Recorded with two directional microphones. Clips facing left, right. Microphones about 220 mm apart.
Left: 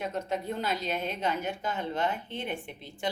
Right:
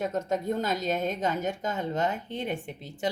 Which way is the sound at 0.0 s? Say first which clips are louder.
Right 4 dB; 45° right (ahead or behind).